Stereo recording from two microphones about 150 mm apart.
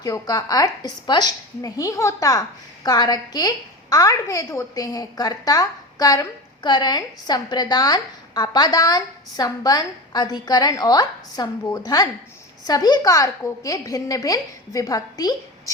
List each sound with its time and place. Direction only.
0.0 s a woman's voice: 25° left (ahead or behind)